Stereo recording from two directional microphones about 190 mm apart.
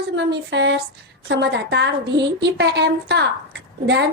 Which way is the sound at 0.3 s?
65° right (ahead or behind).